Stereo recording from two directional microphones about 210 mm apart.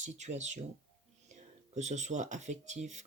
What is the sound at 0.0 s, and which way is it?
Speech, 35° right (ahead or behind).